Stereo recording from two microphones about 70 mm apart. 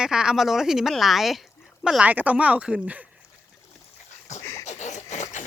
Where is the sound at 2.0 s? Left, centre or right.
Right.